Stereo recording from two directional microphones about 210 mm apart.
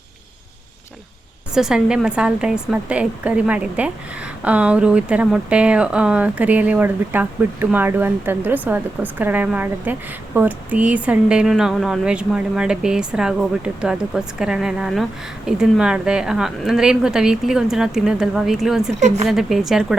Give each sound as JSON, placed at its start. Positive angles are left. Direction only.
{"t": 1.5, "sound": "a woman's voice", "side_deg": -5}
{"t": 18.9, "sound": "a woman's voice", "side_deg": -35}
{"t": 19.3, "sound": "a woman's voice", "side_deg": 0}